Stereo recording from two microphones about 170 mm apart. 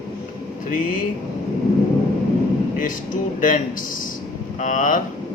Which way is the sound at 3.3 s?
50° left (ahead or behind).